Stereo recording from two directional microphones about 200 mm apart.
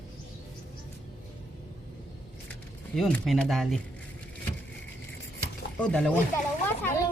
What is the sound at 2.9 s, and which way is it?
Speech, centre (ahead or behind).